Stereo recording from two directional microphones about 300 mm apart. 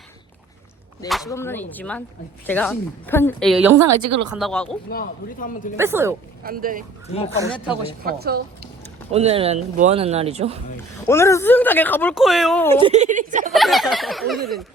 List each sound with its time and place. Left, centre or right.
1.0 s speech: centre
3.7 s a woman's voice: right
4.3 s speech: centre
4.9 s a man's voice: left
5.7 s speech: centre
6.4 s speech: right
8.0 s speech: right
9.1 s speech: centre
11.0 s speech: centre
12.8 s speech: right
13.5 s speech: centre